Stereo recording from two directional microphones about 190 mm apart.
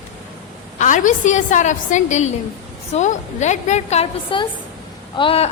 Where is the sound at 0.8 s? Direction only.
40° left (ahead or behind).